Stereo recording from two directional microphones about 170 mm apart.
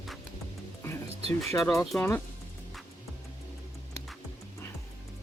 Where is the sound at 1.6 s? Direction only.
Centre (ahead or behind).